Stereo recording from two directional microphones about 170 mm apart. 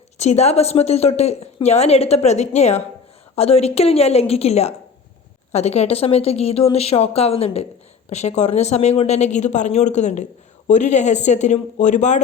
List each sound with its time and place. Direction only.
0.2 s a woman's voice: 40° left (ahead or behind)